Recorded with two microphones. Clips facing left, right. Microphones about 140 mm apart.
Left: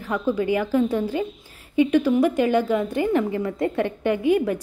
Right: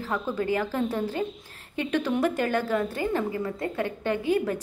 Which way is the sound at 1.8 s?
10° left (ahead or behind).